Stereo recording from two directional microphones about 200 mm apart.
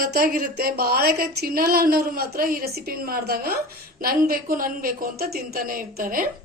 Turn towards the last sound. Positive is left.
turn(degrees=-45)  # may be behind; listen again after turning